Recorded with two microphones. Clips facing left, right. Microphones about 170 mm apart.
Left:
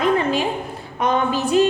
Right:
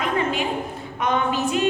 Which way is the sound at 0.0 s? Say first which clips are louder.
Left 5 dB; 35° left (ahead or behind).